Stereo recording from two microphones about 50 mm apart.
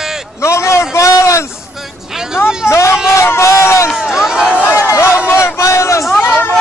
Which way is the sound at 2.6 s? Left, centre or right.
Left.